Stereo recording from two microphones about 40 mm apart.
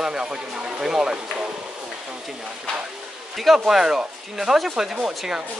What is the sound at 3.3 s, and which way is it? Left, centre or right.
Speech, centre.